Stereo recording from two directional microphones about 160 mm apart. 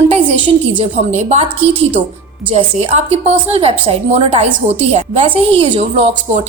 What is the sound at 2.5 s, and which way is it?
A woman's voice, 45° right (ahead or behind).